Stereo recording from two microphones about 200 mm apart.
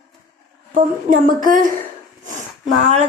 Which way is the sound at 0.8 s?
40° right (ahead or behind).